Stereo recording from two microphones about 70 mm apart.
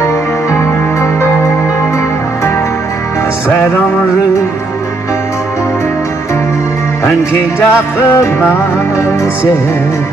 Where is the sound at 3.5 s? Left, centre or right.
Left.